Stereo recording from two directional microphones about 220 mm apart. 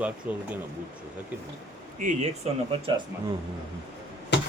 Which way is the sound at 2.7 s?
25° right (ahead or behind).